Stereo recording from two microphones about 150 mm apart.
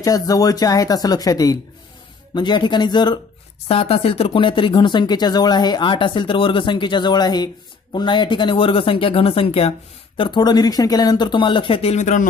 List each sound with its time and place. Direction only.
0.0 s speech: 25° left (ahead or behind)
3.6 s speech: 40° left (ahead or behind)